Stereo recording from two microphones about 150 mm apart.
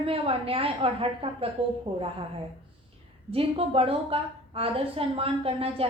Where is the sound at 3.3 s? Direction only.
40° right (ahead or behind).